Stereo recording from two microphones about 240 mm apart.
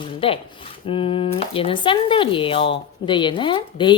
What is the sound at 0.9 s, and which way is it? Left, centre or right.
A woman's voice, left.